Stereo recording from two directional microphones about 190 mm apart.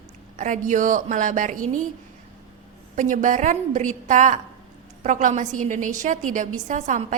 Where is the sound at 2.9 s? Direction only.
40° right (ahead or behind).